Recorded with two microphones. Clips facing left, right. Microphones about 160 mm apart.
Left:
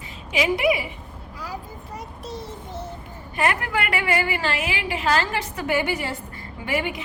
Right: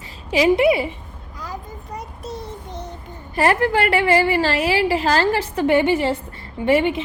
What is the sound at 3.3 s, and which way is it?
A woman's voice, 35° right (ahead or behind).